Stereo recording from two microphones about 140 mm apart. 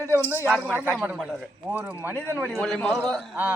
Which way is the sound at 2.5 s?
5° left (ahead or behind).